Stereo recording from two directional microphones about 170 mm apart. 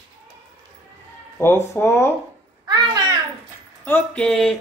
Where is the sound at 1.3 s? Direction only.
15° left (ahead or behind).